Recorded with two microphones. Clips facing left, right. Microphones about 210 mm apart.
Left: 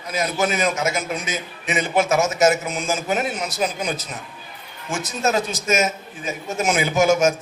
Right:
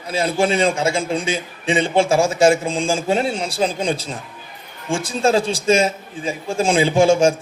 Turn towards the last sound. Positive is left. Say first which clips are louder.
# right 3 dB
turn(degrees=-30)  # may be behind; listen again after turning